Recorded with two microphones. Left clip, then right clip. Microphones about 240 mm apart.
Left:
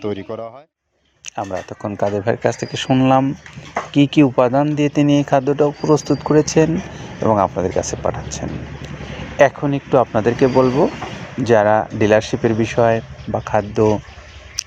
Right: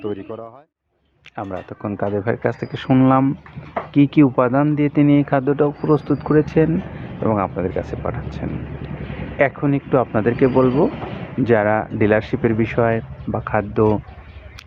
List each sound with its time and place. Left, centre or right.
0.0 s speech: left
1.4 s speech: centre